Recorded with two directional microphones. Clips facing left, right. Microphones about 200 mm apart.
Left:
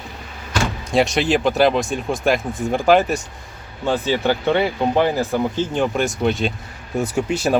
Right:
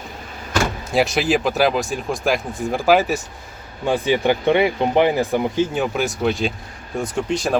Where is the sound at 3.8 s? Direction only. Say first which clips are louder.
Right 1 dB; 10° right (ahead or behind); by 7.6 s 5° left (ahead or behind).